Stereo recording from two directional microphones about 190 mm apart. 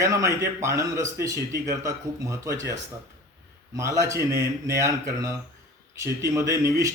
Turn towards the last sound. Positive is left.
turn(degrees=-15)  # may be behind; listen again after turning